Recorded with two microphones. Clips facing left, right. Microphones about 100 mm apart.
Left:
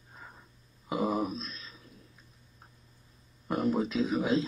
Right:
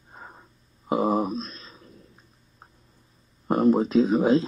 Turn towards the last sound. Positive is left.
turn(degrees=-40)  # may be behind; listen again after turning